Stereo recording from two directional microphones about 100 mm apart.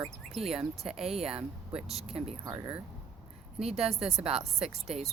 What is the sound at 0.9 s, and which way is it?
Speech, 80° right.